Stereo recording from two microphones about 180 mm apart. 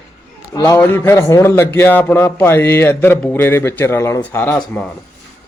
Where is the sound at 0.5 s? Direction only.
20° left (ahead or behind).